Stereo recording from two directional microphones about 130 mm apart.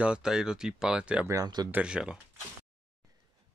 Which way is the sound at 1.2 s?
30° right (ahead or behind).